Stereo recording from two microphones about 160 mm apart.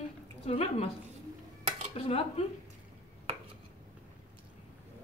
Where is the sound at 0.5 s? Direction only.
40° left (ahead or behind).